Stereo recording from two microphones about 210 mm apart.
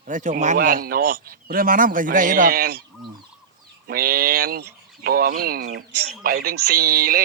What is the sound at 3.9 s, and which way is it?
A man's voice, 45° right (ahead or behind).